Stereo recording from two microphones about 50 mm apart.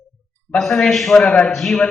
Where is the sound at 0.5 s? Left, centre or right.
Centre.